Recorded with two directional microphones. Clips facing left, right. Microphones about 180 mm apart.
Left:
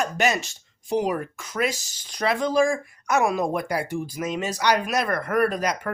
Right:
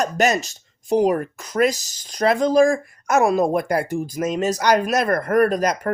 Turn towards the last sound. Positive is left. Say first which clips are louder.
# right 5 dB
turn(degrees=-45)  # may be behind; listen again after turning